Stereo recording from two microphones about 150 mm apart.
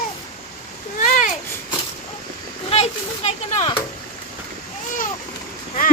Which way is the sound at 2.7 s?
45° left (ahead or behind).